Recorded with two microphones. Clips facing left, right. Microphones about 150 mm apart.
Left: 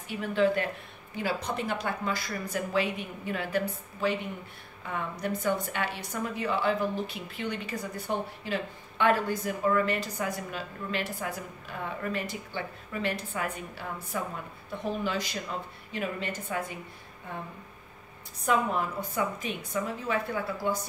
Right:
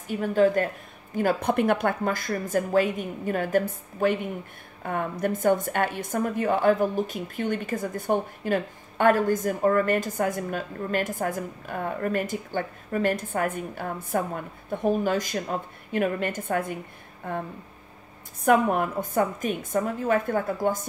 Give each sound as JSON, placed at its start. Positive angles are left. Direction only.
{"t": 0.1, "sound": "a woman's voice", "side_deg": -45}
{"t": 18.4, "sound": "a woman's voice", "side_deg": -55}